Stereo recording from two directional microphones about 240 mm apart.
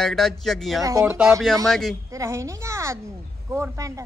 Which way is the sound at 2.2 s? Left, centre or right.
Centre.